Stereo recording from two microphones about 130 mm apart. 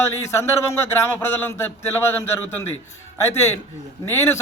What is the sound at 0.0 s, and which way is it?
A man's voice, 20° left (ahead or behind).